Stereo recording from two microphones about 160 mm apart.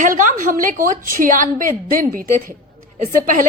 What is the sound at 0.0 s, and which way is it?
A woman's voice, 55° right (ahead or behind).